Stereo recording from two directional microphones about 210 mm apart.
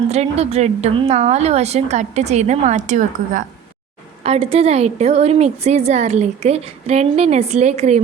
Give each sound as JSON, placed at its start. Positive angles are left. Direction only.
{"t": 0.1, "sound": "a woman's voice", "side_deg": -30}